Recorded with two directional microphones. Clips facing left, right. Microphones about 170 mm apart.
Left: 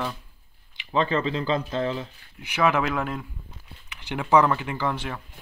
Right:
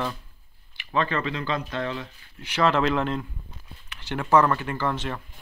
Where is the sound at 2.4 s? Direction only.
10° left (ahead or behind).